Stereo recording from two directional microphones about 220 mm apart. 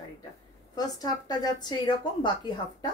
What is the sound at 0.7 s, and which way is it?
Speech, 15° left (ahead or behind).